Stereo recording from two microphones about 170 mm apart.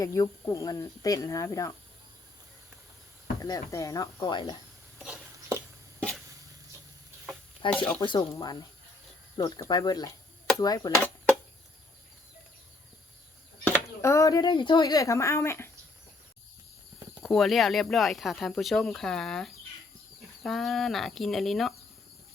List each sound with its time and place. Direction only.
0.0 s speech: 20° left (ahead or behind)
3.4 s speech: 20° left (ahead or behind)
4.9 s a sound: 5° right (ahead or behind)
7.6 s speech: 30° left (ahead or behind)
13.7 s speech: 15° left (ahead or behind)
17.2 s speech: centre (ahead or behind)